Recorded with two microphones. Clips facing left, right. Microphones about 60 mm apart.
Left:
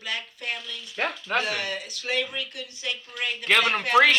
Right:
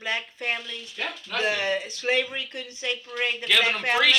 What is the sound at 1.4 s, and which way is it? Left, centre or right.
Speech, right.